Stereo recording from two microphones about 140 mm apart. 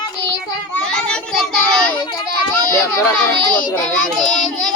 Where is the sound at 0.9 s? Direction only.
5° left (ahead or behind).